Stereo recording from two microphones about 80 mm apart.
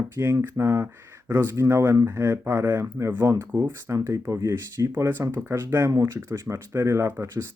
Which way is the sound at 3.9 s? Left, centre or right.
Right.